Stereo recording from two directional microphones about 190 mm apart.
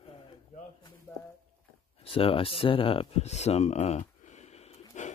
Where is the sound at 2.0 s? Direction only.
30° left (ahead or behind).